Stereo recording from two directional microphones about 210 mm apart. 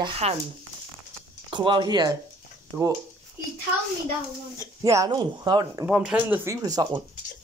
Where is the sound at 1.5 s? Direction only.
20° right (ahead or behind).